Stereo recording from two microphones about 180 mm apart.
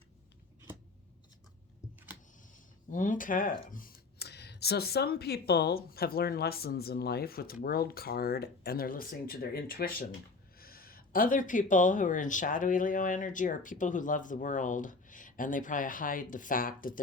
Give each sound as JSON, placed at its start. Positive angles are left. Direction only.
{"t": 2.5, "sound": "speech", "side_deg": 45}